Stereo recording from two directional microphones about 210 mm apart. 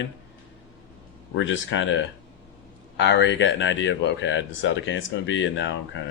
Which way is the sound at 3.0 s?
60° left (ahead or behind).